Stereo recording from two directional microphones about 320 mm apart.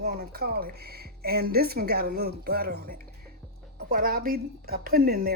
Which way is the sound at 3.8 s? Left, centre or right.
Right.